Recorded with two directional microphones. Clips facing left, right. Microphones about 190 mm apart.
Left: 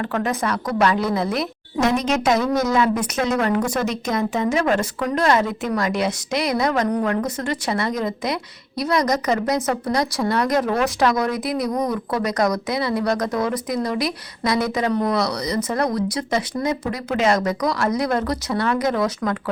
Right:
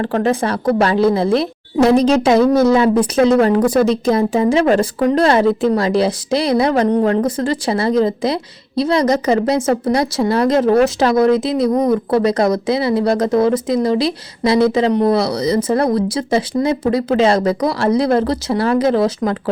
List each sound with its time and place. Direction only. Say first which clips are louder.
0.0 s a woman's voice: right 6 dB; 30° right (ahead or behind)